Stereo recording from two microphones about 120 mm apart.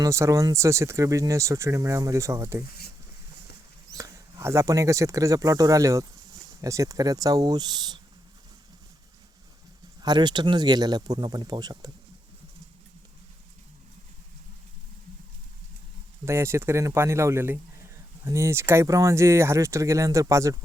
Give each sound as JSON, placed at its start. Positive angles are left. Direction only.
{"t": 0.0, "sound": "speech", "side_deg": -25}
{"t": 3.9, "sound": "speech", "side_deg": -25}
{"t": 10.0, "sound": "speech", "side_deg": -35}
{"t": 16.2, "sound": "speech", "side_deg": -20}